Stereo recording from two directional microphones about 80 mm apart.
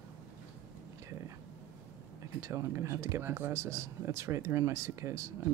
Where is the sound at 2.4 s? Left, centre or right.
Right.